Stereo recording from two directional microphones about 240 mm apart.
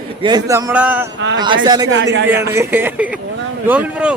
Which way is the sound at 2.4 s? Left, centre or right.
Centre.